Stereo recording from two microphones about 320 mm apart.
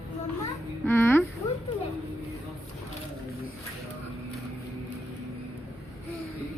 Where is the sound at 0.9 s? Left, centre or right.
Centre.